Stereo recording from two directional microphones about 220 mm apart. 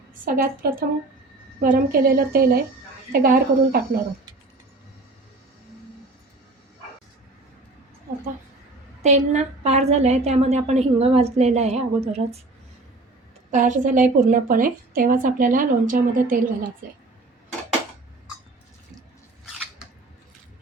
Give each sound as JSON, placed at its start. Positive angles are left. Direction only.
{"t": 0.1, "sound": "a woman's voice", "side_deg": -40}
{"t": 9.0, "sound": "a woman's voice", "side_deg": -30}
{"t": 13.5, "sound": "a woman's voice", "side_deg": -35}